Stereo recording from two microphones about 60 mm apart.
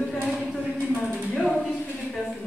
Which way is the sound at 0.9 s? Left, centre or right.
Centre.